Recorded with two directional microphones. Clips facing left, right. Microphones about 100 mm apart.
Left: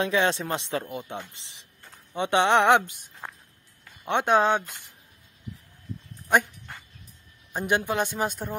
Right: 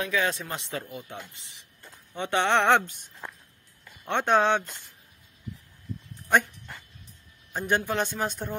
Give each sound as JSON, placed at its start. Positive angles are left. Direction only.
{"t": 0.0, "sound": "a woman's voice", "side_deg": 30}
{"t": 4.0, "sound": "speech", "side_deg": 15}
{"t": 4.4, "sound": "speech", "side_deg": 0}
{"t": 7.5, "sound": "speech", "side_deg": 15}